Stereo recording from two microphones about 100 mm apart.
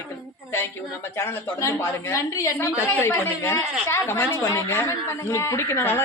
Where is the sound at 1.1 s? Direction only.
30° left (ahead or behind).